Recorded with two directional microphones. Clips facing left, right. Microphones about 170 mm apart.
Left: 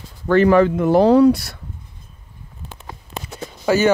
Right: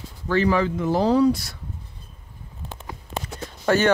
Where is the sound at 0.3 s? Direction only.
55° left (ahead or behind).